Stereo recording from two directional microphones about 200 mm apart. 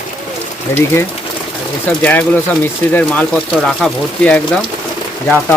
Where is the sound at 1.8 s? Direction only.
10° left (ahead or behind).